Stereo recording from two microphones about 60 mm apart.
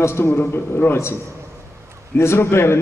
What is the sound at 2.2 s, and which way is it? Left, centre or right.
Speech, left.